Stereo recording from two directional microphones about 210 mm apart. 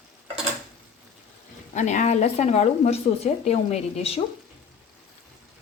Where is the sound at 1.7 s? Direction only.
35° left (ahead or behind).